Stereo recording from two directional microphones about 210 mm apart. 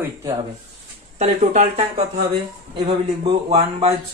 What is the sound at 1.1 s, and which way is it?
Speech, 30° right (ahead or behind).